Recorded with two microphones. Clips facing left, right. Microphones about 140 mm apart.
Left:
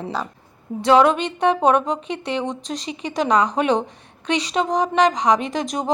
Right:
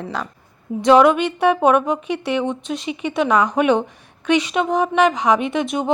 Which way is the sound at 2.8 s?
35° left (ahead or behind).